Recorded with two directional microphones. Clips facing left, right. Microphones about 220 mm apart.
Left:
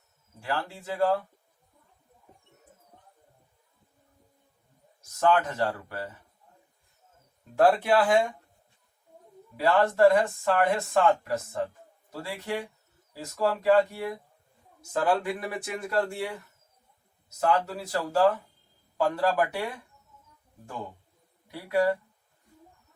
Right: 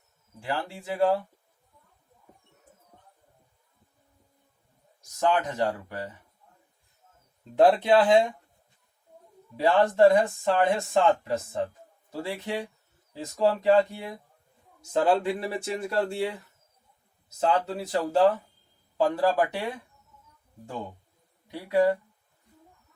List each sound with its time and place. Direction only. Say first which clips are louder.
0.4 s speech: right 1 dB; 15° right (ahead or behind)
5.2 s speech: left 1 dB; 15° right (ahead or behind)
7.5 s speech: right 2 dB; 20° right (ahead or behind)
9.6 s speech: right 1 dB; 20° right (ahead or behind)
14.9 s speech: right 3 dB; 25° right (ahead or behind)
17.4 s speech: right 1 dB; 20° right (ahead or behind)
21.4 s speech: right 2 dB; 20° right (ahead or behind)